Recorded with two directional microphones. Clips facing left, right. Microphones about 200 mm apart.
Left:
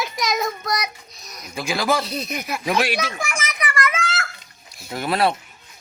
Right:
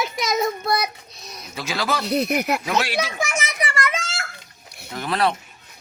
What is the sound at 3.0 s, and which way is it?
Children playing, 20° right (ahead or behind).